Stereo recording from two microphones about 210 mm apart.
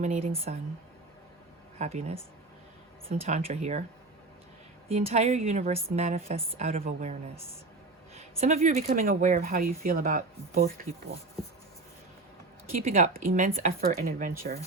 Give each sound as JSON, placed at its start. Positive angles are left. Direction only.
{"t": 0.0, "sound": "speech", "side_deg": -30}
{"t": 1.8, "sound": "a woman's voice", "side_deg": -30}
{"t": 4.9, "sound": "a woman's voice", "side_deg": -30}
{"t": 12.9, "sound": "a woman's voice", "side_deg": -35}